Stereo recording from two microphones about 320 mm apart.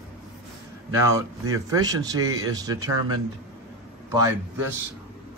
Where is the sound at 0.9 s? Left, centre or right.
Centre.